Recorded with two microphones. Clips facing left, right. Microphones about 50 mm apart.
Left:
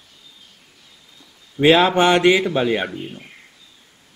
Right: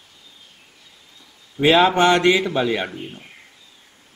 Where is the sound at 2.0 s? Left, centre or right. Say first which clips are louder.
Left 1 dB; centre.